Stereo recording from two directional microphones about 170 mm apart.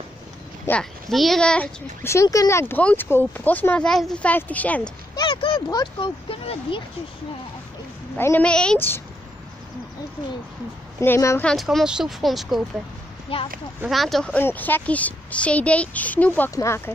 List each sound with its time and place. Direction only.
0.7 s speech: 5° left (ahead or behind)
2.0 s a woman's voice: 20° left (ahead or behind)
5.1 s speech: 30° left (ahead or behind)
8.2 s a woman's voice: 10° left (ahead or behind)
11.0 s a woman's voice: 15° left (ahead or behind)
11.4 s speech: centre (ahead or behind)
13.3 s speech: 30° left (ahead or behind)
13.8 s a woman's voice: centre (ahead or behind)